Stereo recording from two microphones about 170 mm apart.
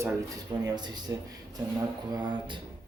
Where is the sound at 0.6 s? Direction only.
25° right (ahead or behind).